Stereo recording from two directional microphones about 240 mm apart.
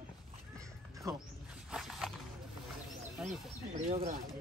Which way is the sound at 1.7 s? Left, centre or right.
Centre.